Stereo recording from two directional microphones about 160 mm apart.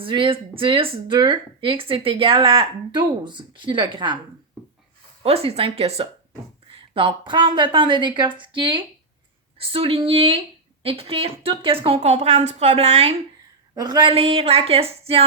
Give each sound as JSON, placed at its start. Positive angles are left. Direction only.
{"t": 0.0, "sound": "speech", "side_deg": -30}
{"t": 5.2, "sound": "a woman's voice", "side_deg": -40}
{"t": 13.7, "sound": "speech", "side_deg": -25}